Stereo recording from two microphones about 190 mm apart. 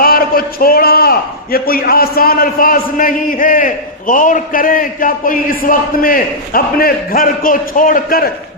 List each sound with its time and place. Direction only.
0.0 s a man's voice: 50° left (ahead or behind)